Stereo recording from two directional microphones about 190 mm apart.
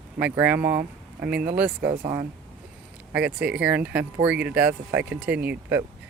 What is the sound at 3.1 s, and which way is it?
Speech, 5° right (ahead or behind).